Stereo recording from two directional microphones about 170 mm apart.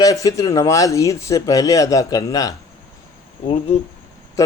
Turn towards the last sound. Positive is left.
turn(degrees=20)  # may be behind; listen again after turning